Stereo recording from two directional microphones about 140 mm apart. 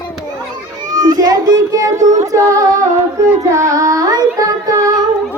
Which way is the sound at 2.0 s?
60° right (ahead or behind).